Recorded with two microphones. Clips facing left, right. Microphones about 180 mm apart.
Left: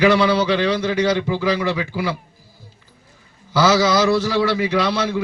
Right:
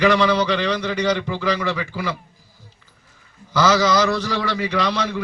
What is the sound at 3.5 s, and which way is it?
A man's voice, 10° left (ahead or behind).